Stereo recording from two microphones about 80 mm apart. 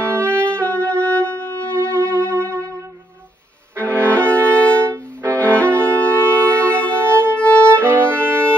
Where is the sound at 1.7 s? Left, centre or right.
Right.